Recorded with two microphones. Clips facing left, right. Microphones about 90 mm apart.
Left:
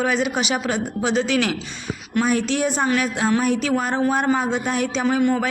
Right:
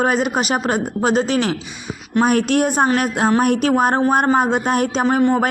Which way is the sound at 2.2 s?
60° right (ahead or behind).